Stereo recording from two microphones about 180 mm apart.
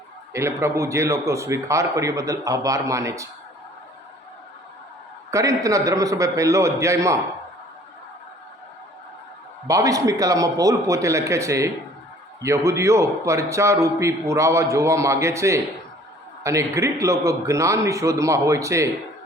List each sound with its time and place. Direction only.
0.3 s a man's voice: 15° right (ahead or behind)
5.3 s a man's voice: 20° right (ahead or behind)
9.6 s a man's voice: 20° right (ahead or behind)